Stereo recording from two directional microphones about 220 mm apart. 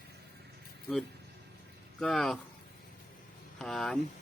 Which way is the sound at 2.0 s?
Centre (ahead or behind).